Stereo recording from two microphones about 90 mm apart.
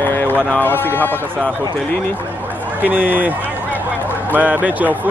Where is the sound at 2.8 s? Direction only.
20° right (ahead or behind).